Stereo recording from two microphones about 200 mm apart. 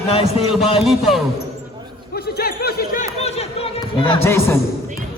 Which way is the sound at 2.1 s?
55° left (ahead or behind).